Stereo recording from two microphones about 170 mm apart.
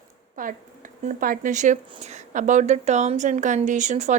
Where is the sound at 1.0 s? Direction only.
55° right (ahead or behind).